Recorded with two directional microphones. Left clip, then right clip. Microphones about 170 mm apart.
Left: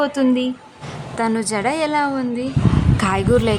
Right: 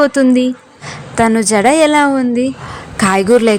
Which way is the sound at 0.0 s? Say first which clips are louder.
Right 7 dB; 25° right (ahead or behind).